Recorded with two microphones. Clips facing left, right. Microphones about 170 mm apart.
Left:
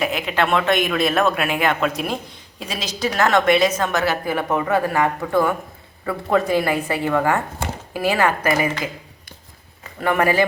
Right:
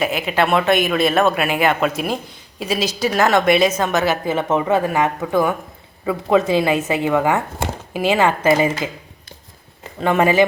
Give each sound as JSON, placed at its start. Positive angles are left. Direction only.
{"t": 0.0, "sound": "a woman's voice", "side_deg": -5}
{"t": 10.0, "sound": "a woman's voice", "side_deg": -20}